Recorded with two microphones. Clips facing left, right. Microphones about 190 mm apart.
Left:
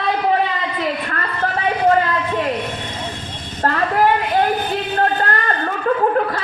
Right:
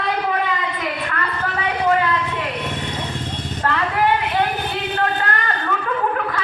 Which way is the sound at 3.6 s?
40° left (ahead or behind).